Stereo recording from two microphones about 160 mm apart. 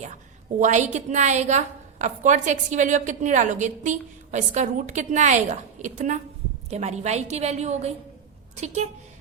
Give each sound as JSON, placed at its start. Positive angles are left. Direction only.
{"t": 0.6, "sound": "a woman's voice", "side_deg": -50}